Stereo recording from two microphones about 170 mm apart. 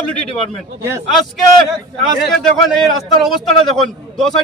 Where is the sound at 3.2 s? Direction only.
Centre (ahead or behind).